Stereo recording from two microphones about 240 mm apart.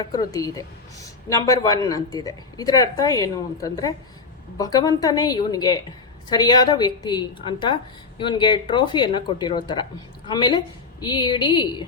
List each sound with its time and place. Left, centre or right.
0.1 s a woman's voice: centre